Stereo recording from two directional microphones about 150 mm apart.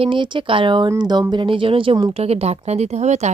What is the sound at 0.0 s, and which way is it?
Speech, 35° right (ahead or behind).